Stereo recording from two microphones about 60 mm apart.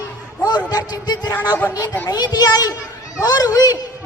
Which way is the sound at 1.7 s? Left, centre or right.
Left.